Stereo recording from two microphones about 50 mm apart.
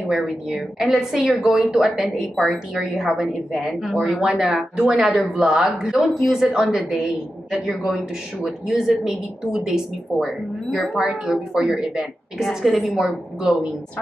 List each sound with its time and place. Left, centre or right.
0.0 s a woman's voice: centre
0.6 s a woman's voice: centre
4.2 s a woman's voice: centre
12.4 s a woman's voice: centre